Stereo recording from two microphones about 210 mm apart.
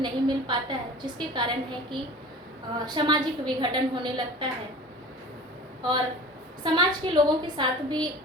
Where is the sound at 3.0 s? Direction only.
20° right (ahead or behind).